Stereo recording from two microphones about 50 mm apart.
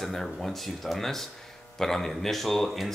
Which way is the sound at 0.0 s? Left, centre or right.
Centre.